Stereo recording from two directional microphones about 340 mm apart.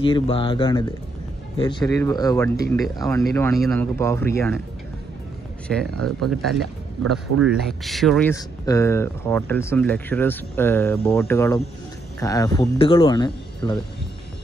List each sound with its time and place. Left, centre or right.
0.0 s speech: centre
5.9 s speech: right
7.0 s speech: centre